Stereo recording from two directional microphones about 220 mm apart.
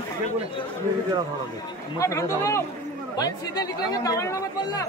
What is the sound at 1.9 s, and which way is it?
Speech, 15° left (ahead or behind).